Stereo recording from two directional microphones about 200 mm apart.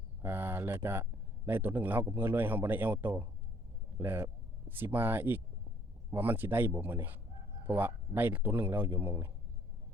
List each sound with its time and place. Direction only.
0.2 s a man's voice: 10° right (ahead or behind)